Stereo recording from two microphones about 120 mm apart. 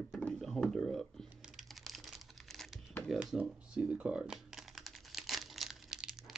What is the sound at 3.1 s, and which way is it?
Typing, 5° right (ahead or behind).